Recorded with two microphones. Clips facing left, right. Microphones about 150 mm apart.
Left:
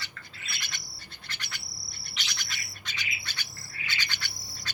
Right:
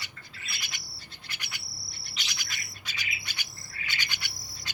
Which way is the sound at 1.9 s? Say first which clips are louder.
Even; 50° left (ahead or behind).